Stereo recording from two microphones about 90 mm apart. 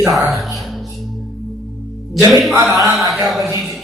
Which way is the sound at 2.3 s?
Centre (ahead or behind).